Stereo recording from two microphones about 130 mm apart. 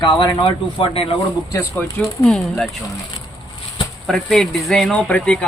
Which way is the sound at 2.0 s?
Centre (ahead or behind).